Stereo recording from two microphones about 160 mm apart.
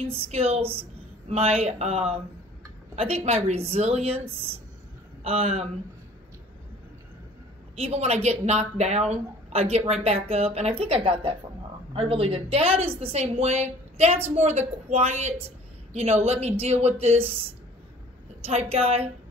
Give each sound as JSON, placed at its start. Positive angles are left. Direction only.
{"t": 0.0, "sound": "a woman's voice", "side_deg": -40}
{"t": 7.7, "sound": "a woman's voice", "side_deg": -40}
{"t": 18.4, "sound": "a woman's voice", "side_deg": -40}